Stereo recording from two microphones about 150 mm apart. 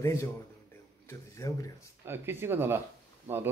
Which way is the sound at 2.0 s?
15° right (ahead or behind).